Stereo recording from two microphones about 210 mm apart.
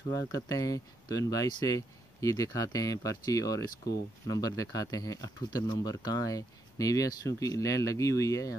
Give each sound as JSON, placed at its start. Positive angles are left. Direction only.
{"t": 0.1, "sound": "speech", "side_deg": 15}